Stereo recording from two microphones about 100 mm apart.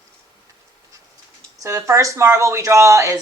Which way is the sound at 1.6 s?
30° right (ahead or behind).